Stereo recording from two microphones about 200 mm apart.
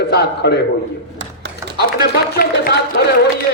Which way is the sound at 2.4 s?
50° left (ahead or behind).